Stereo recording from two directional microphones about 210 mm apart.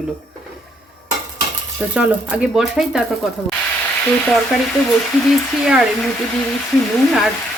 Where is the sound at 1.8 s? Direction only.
5° right (ahead or behind).